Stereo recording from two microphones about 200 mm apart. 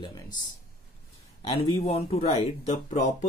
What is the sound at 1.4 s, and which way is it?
Speech, 30° left (ahead or behind).